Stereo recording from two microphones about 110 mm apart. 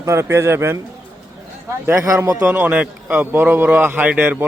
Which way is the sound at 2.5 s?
15° right (ahead or behind).